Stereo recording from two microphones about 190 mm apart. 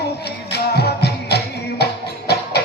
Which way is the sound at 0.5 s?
60° left (ahead or behind).